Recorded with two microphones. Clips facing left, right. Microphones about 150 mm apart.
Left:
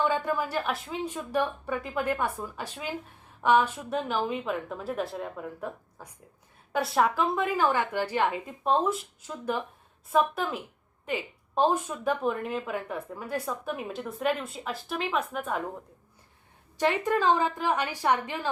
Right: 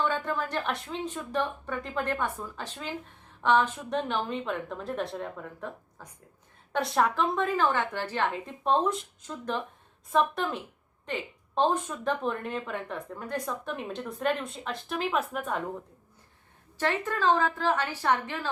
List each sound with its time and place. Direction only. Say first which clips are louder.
0.0 s a woman's voice: left 2 dB; 10° left (ahead or behind)
16.7 s a woman's voice: left 4 dB; 15° left (ahead or behind)